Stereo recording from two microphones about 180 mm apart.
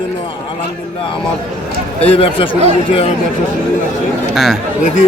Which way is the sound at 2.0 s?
30° left (ahead or behind).